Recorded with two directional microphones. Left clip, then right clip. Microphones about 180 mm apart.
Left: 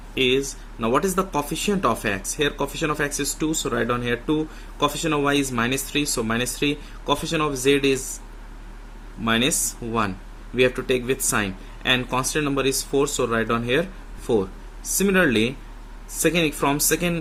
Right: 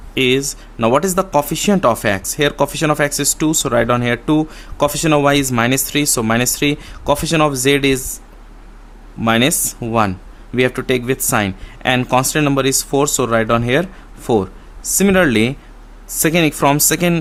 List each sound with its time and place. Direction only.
0.1 s speech: 45° right (ahead or behind)
9.2 s speech: 40° right (ahead or behind)